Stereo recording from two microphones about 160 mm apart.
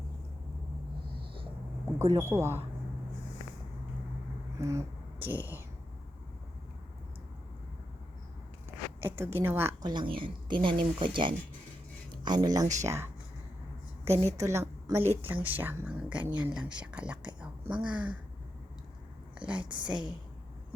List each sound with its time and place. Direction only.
2.3 s speech: 15° right (ahead or behind)
4.5 s a sound: 20° right (ahead or behind)
9.0 s speech: 15° right (ahead or behind)
9.8 s speech: 30° right (ahead or behind)
14.1 s a woman's voice: 40° right (ahead or behind)
14.3 s a woman's voice: 20° right (ahead or behind)
19.4 s speech: 5° right (ahead or behind)
19.6 s speech: 30° right (ahead or behind)
19.9 s speech: 5° right (ahead or behind)